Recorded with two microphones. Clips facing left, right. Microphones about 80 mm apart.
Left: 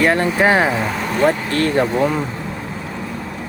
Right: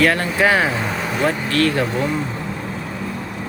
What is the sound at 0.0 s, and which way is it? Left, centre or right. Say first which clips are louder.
Speech: left 2 dB; left.